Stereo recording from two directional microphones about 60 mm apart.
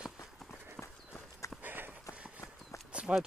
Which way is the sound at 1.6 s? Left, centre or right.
Right.